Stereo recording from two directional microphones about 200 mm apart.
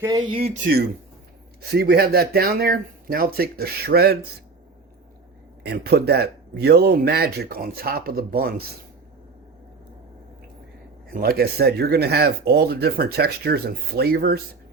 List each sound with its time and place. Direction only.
0.0 s speech: 20° right (ahead or behind)
0.6 s speech: 50° right (ahead or behind)
5.6 s speech: 50° right (ahead or behind)
11.1 s speech: 50° right (ahead or behind)